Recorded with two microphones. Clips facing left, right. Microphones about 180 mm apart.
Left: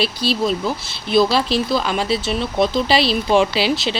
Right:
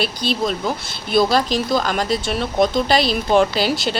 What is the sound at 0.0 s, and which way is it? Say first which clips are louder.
Speech: left 1 dB; centre (ahead or behind).